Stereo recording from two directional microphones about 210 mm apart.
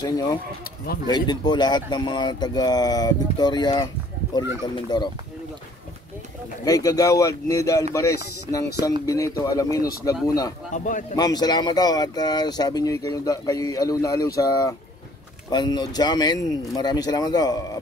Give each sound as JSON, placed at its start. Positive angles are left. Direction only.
{"t": 0.0, "sound": "speech", "side_deg": 20}
{"t": 6.6, "sound": "speech", "side_deg": 15}
{"t": 9.0, "sound": "speech", "side_deg": 15}
{"t": 10.7, "sound": "a man's voice", "side_deg": 35}
{"t": 11.1, "sound": "speech", "side_deg": 20}